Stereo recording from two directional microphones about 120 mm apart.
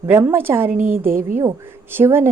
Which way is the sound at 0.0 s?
20° right (ahead or behind).